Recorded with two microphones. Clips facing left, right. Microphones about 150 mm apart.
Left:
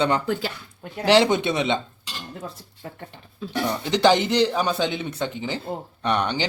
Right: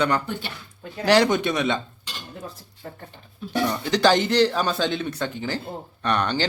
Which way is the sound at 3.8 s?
20° left (ahead or behind).